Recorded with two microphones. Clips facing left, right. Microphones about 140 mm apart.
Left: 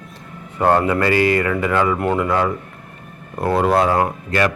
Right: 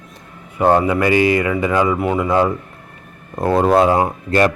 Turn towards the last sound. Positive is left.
turn(degrees=-30)  # may be behind; listen again after turning